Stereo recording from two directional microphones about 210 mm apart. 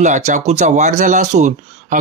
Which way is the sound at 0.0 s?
35° right (ahead or behind).